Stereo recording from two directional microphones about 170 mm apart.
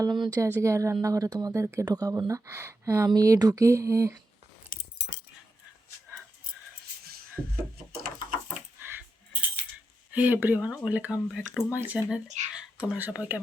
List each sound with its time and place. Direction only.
0.0 s speech: 25° right (ahead or behind)
4.7 s keys jangling: 75° left (ahead or behind)
7.0 s a sound: 60° right (ahead or behind)
10.1 s speech: 10° right (ahead or behind)